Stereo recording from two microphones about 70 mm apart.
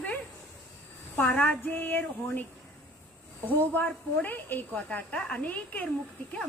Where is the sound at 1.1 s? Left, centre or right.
Left.